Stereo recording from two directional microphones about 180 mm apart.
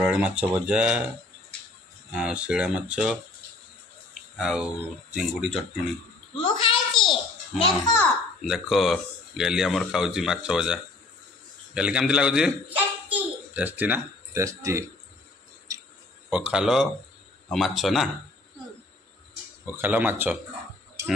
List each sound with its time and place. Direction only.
0.0 s speech: 5° right (ahead or behind)
2.1 s speech: 5° right (ahead or behind)
4.4 s speech: centre (ahead or behind)
6.3 s a sound: 30° left (ahead or behind)
6.9 s a sound: centre (ahead or behind)
7.5 s a child's voice: 30° left (ahead or behind)
8.5 s a child's voice: centre (ahead or behind); by 14.9 s 15° right (ahead or behind)
16.3 s speech: 5° right (ahead or behind)
19.6 s speech: 10° right (ahead or behind)